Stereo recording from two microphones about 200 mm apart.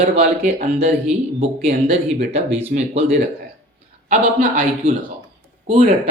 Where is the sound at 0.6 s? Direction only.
35° right (ahead or behind).